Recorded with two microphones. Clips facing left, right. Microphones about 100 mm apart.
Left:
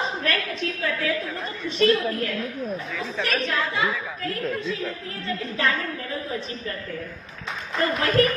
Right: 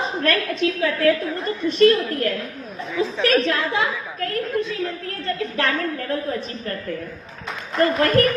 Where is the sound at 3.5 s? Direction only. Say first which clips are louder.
Right 4 dB; 90° right.